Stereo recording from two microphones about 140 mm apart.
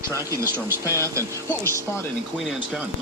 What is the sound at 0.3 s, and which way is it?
Speech, 20° right (ahead or behind).